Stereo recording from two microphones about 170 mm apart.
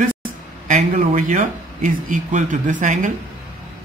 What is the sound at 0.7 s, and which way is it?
Speech, 45° right (ahead or behind).